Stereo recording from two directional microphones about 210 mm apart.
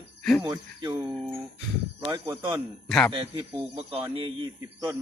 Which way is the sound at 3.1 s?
25° right (ahead or behind).